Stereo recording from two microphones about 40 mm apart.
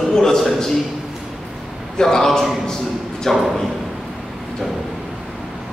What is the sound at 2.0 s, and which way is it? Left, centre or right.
A man's voice, centre.